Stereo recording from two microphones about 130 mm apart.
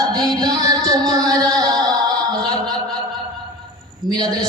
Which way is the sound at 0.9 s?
30° right (ahead or behind).